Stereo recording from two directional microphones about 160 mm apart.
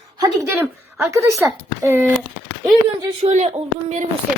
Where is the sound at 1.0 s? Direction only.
20° right (ahead or behind).